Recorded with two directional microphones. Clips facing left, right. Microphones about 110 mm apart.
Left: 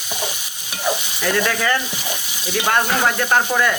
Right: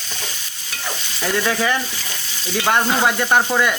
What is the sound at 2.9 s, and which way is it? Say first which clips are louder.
Speech: right 1 dB; 15° right (ahead or behind).